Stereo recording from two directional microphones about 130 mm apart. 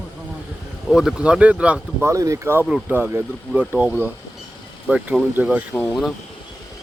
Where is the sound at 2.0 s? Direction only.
25° right (ahead or behind).